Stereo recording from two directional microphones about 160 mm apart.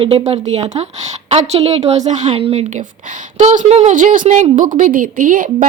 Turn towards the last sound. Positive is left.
turn(degrees=-60)  # may be behind; listen again after turning